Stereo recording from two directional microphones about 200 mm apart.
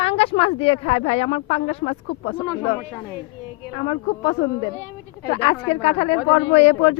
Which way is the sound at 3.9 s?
20° left (ahead or behind).